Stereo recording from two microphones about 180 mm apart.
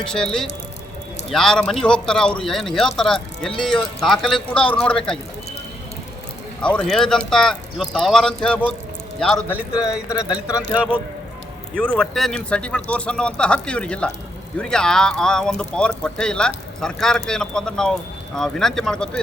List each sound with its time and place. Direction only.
0.0 s speech: 5° left (ahead or behind)
6.6 s speech: 5° left (ahead or behind)
9.8 s speech: 15° left (ahead or behind)
11.7 s speech: 5° left (ahead or behind)